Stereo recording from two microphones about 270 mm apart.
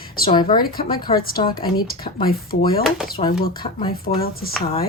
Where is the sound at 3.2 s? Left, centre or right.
Left.